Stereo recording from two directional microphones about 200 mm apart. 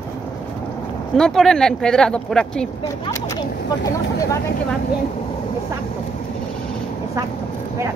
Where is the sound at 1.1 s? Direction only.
Centre (ahead or behind).